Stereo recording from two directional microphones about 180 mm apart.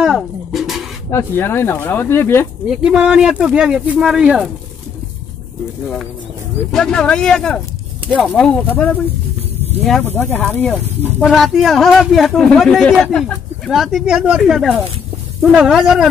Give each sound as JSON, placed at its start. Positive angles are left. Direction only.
{"t": 0.0, "sound": "a sound", "side_deg": 0}
{"t": 1.1, "sound": "speech", "side_deg": 10}
{"t": 2.7, "sound": "a man's voice", "side_deg": -5}
{"t": 6.7, "sound": "a man's voice", "side_deg": 5}